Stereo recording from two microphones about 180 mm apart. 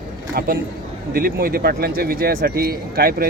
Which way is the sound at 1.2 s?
55° right (ahead or behind).